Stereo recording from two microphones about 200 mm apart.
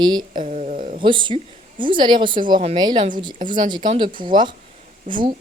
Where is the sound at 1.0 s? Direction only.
25° right (ahead or behind).